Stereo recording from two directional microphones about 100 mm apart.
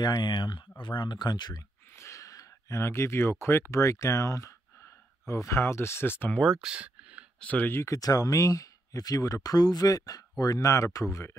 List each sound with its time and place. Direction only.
0.0 s speech: 45° left (ahead or behind)
2.0 s speech: 30° left (ahead or behind); by 6.5 s 15° left (ahead or behind)
6.5 s a sound: 10° right (ahead or behind)
7.3 s speech: 15° left (ahead or behind); by 11.3 s 30° left (ahead or behind)